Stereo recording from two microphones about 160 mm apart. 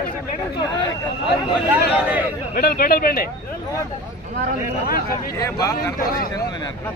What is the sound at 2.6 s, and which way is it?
Speech, 70° left (ahead or behind).